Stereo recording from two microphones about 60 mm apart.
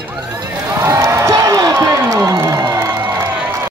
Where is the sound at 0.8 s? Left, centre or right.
Right.